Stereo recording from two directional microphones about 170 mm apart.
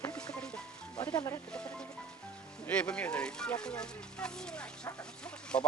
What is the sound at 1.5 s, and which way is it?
Speech, 5° left (ahead or behind).